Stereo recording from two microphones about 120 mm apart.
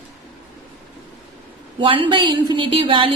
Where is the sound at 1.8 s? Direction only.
45° right (ahead or behind).